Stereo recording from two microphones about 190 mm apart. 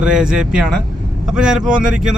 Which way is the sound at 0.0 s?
5° right (ahead or behind).